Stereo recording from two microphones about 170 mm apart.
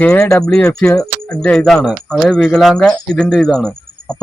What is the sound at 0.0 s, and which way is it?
Speech, 10° left (ahead or behind).